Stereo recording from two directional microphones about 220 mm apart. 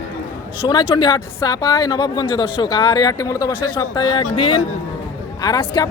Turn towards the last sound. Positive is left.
turn(degrees=15)  # may be behind; listen again after turning